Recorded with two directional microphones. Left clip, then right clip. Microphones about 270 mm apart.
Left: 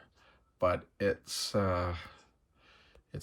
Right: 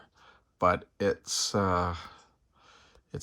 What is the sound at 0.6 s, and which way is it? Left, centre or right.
Speech, centre.